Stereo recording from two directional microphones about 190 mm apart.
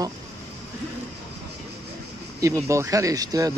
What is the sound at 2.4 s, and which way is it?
Speech, 15° right (ahead or behind).